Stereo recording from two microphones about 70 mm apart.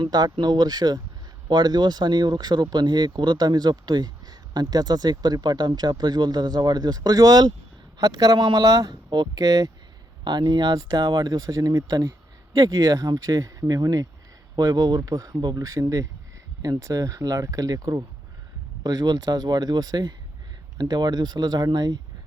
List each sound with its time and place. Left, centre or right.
0.0 s speech: right
1.5 s speech: right
8.9 s speech: right
10.2 s speech: right
14.5 s speech: right
15.1 s speech: right
15.6 s speech: right
20.7 s speech: right